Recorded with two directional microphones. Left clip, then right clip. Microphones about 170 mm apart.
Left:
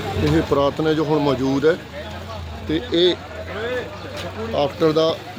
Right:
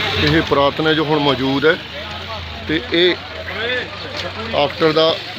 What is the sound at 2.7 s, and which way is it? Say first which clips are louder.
Speech: right 3 dB; centre (ahead or behind).